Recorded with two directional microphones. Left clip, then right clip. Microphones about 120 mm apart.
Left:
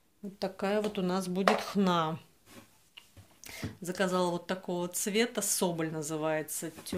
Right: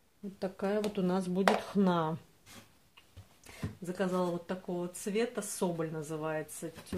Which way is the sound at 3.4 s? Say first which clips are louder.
Left 4 dB; 5° right (ahead or behind).